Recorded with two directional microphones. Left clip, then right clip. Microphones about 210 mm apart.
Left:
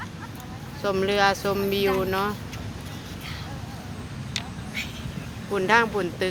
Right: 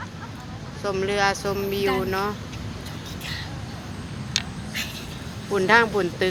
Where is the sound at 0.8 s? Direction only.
20° left (ahead or behind).